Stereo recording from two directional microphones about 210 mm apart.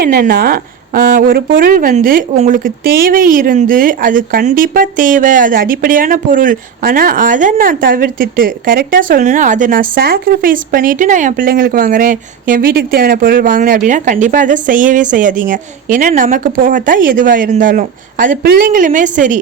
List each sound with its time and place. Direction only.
0.0 s a woman's voice: 45° right (ahead or behind)